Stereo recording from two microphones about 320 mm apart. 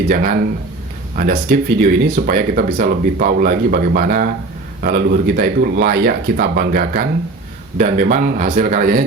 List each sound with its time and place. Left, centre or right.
0.1 s speech: right